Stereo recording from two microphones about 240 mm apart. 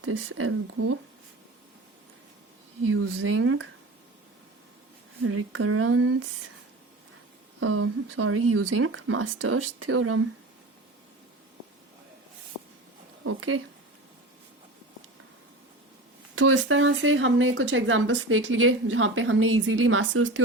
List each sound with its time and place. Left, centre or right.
0.0 s speech: right
2.8 s speech: right
5.2 s speech: right
7.6 s speech: right
13.2 s speech: right
16.3 s speech: right